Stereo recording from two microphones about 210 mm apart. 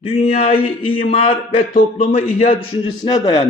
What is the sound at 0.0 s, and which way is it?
A man's voice, 30° left (ahead or behind).